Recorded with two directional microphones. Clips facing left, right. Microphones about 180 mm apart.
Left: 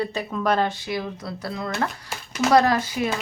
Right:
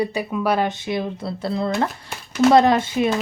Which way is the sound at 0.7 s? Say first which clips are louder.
Right 4 dB; 20° right (ahead or behind).